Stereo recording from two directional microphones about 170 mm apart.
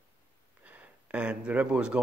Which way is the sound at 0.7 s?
10° right (ahead or behind).